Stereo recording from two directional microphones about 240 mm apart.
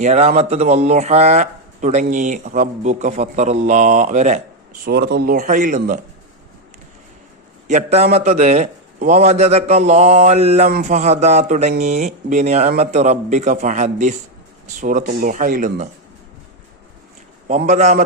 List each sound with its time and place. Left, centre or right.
0.0 s speech: right
4.9 s speech: right
7.7 s speech: right
17.5 s speech: right